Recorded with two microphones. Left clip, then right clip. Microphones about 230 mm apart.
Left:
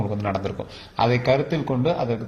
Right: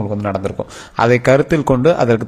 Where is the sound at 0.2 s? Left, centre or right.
Right.